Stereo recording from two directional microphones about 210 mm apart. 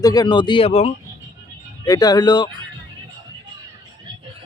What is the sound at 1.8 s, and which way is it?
Speech, 20° left (ahead or behind).